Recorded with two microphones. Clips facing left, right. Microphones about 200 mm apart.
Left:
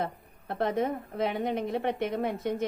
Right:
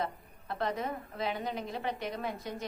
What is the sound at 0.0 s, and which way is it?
A woman's voice, 60° left (ahead or behind).